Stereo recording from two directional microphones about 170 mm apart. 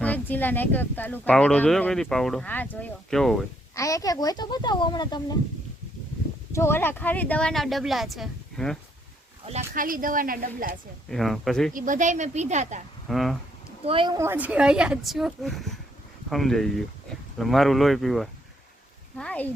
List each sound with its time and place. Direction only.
0.0 s speech: 10° left (ahead or behind)
3.8 s speech: 20° left (ahead or behind)
6.5 s speech: 15° left (ahead or behind)
9.5 s speech: 45° right (ahead or behind)
11.1 s speech: centre (ahead or behind)
11.7 s speech: 50° right (ahead or behind)
13.1 s speech: centre (ahead or behind)
13.8 s speech: 30° right (ahead or behind)
14.2 s speech: 10° right (ahead or behind); by 19.5 s 5° left (ahead or behind)